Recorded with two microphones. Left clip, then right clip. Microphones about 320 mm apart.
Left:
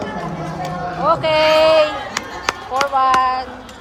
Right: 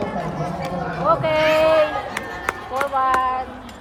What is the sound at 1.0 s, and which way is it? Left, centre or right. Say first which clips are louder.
Chop: left 3 dB; centre.